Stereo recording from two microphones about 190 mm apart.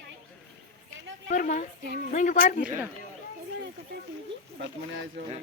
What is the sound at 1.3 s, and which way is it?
Speech, 40° left (ahead or behind).